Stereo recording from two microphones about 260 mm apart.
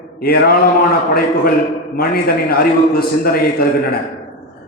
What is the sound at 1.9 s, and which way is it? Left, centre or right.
Mantra, left.